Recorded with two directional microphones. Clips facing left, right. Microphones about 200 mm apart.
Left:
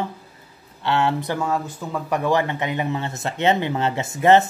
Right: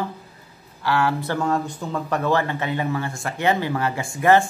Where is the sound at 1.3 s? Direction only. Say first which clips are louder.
Right 1 dB; 5° left (ahead or behind).